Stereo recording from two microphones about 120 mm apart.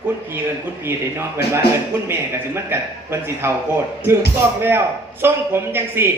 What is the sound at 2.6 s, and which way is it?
Speech, 20° right (ahead or behind).